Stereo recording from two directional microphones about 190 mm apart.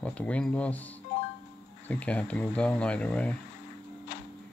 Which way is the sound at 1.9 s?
5° left (ahead or behind).